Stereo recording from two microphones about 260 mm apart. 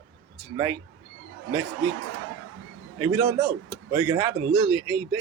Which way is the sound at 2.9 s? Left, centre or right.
Centre.